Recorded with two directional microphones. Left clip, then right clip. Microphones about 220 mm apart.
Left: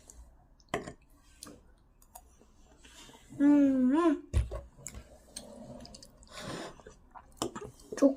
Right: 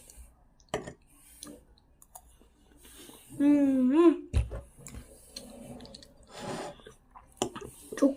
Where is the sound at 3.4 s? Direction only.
10° left (ahead or behind).